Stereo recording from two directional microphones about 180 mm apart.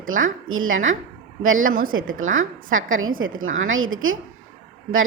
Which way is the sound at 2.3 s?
90° right.